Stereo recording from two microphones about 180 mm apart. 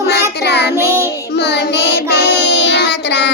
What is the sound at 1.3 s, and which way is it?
Child singing, 65° left (ahead or behind).